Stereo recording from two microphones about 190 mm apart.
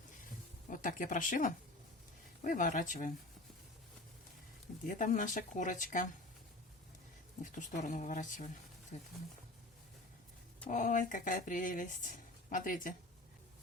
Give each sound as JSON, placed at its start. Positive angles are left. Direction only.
{"t": 0.7, "sound": "speech", "side_deg": 45}
{"t": 4.9, "sound": "speech", "side_deg": 40}
{"t": 7.5, "sound": "a woman's voice", "side_deg": 40}
{"t": 10.7, "sound": "speech", "side_deg": 45}